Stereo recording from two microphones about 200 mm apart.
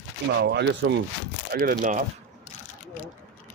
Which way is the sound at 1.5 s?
45° right (ahead or behind).